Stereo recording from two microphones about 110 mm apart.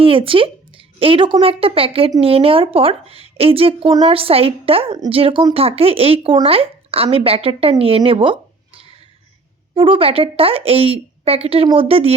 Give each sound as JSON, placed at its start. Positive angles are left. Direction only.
{"t": 0.0, "sound": "a woman's voice", "side_deg": -55}